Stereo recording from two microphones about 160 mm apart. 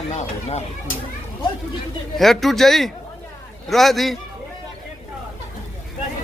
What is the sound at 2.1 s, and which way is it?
Speech, centre (ahead or behind).